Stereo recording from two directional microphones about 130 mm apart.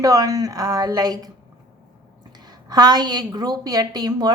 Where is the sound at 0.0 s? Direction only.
25° right (ahead or behind).